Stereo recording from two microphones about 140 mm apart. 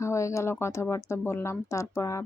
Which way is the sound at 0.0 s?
20° left (ahead or behind).